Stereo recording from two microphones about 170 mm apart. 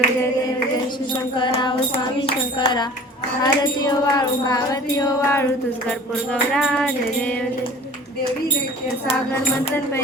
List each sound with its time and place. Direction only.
1.1 s a sound: 25° left (ahead or behind)
3.4 s music: 25° left (ahead or behind)
5.9 s music: 5° left (ahead or behind)